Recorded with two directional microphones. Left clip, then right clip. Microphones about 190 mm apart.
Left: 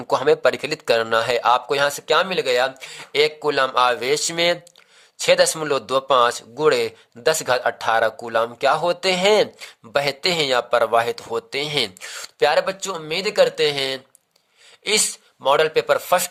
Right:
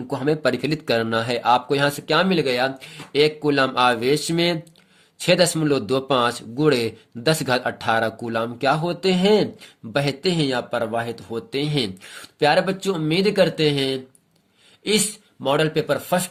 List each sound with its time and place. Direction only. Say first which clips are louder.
0.1 s a man's voice: left 5 dB; 30° left (ahead or behind)